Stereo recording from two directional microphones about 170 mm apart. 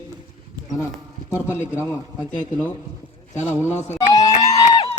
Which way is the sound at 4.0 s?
20° left (ahead or behind).